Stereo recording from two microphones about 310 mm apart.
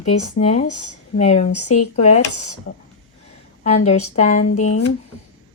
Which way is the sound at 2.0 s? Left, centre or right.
Left.